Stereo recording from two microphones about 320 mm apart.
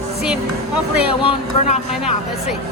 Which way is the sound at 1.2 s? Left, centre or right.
Centre.